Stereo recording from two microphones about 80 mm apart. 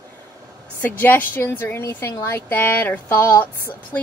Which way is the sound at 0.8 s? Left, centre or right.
Left.